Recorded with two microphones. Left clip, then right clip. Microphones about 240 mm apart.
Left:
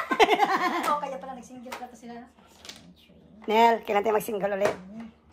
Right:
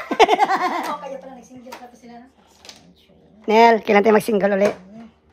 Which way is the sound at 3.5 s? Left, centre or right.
Right.